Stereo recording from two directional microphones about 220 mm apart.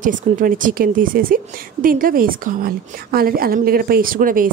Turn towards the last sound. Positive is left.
turn(degrees=-40)  # may be behind; listen again after turning